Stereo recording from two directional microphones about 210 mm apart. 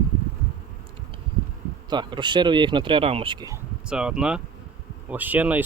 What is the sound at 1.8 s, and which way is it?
Speech, 20° right (ahead or behind).